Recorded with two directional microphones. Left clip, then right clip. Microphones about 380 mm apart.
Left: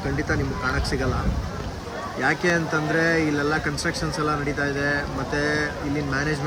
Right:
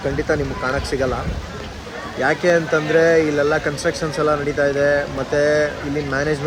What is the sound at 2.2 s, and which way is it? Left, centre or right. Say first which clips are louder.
Speech: right 6 dB; centre.